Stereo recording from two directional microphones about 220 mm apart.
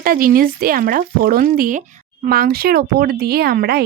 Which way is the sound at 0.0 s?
40° right (ahead or behind).